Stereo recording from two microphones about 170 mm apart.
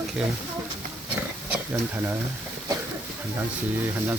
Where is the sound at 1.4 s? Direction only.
15° right (ahead or behind).